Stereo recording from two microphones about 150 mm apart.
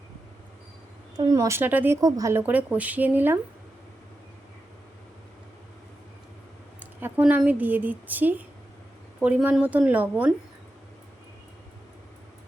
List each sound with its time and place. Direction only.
1.1 s a woman's voice: 25° right (ahead or behind)
2.0 s speech: 25° right (ahead or behind)
2.4 s a woman's voice: 10° right (ahead or behind)
7.0 s a woman's voice: 10° right (ahead or behind)